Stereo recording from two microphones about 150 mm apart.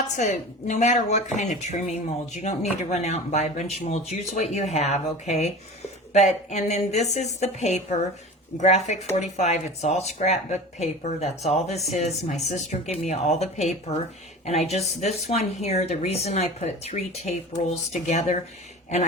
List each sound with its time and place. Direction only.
0.2 s speech: 50° left (ahead or behind)